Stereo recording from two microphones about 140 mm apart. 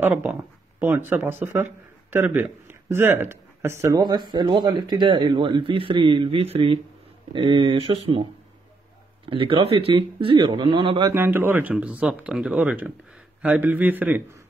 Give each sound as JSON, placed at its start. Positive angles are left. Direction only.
{"t": 0.0, "sound": "speech", "side_deg": -10}
{"t": 11.1, "sound": "speech", "side_deg": -15}